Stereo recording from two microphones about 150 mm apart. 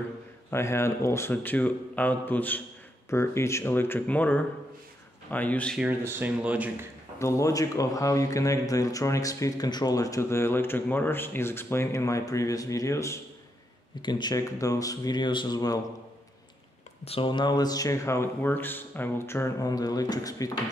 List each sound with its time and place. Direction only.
0.5 s speech: 15° left (ahead or behind)
5.8 s speech: 15° right (ahead or behind)
7.2 s speech: 20° left (ahead or behind)
14.0 s speech: 30° left (ahead or behind)
17.0 s speech: 40° left (ahead or behind)